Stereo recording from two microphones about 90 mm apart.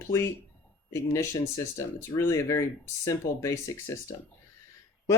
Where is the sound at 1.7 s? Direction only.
35° left (ahead or behind).